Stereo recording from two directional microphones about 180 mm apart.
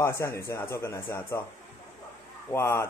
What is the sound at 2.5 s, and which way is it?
Speech, 15° left (ahead or behind).